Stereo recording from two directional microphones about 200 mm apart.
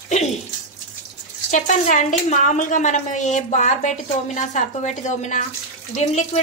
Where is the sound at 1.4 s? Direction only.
40° left (ahead or behind).